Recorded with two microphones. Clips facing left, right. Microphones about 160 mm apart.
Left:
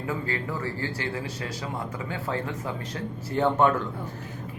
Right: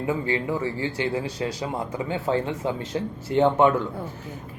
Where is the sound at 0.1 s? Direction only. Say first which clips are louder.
Right 5 dB; 20° right (ahead or behind).